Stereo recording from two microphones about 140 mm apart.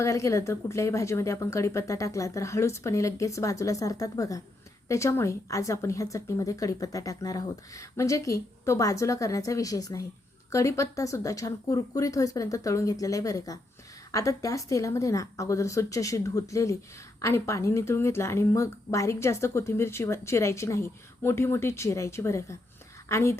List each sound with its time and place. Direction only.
0.0 s speech: 20° left (ahead or behind)